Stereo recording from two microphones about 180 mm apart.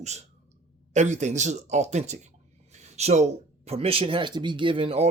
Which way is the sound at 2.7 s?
40° right (ahead or behind).